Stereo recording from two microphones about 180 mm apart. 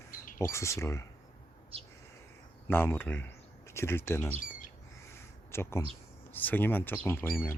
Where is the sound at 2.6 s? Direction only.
10° left (ahead or behind).